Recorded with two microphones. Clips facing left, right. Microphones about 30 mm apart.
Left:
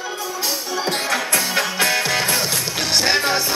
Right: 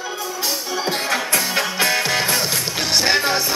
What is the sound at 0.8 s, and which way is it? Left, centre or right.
Music, centre.